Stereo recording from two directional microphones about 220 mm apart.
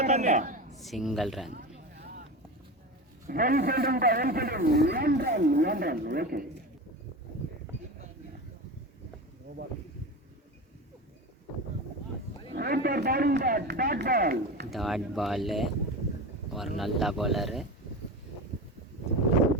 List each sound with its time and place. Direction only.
0.0 s a woman's voice: 30° right (ahead or behind)
0.8 s speech: centre (ahead or behind)
1.5 s a sound: 45° right (ahead or behind)
3.2 s a man's voice: 40° right (ahead or behind)
12.5 s a man's voice: 45° right (ahead or behind)
14.7 s speech: centre (ahead or behind)